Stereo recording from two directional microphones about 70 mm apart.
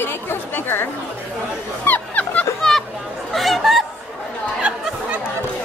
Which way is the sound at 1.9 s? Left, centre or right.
Left.